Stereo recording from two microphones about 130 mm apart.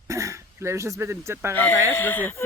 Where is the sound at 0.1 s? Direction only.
25° right (ahead or behind).